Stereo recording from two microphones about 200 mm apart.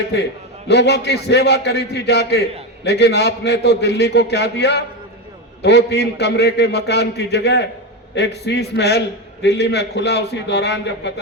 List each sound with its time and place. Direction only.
0.7 s a man's voice: 55° left (ahead or behind)